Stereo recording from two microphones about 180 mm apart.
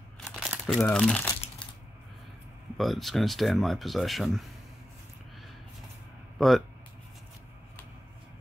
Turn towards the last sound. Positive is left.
turn(degrees=0)  # may be behind; listen again after turning